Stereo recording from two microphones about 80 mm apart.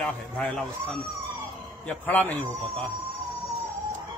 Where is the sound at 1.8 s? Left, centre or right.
Centre.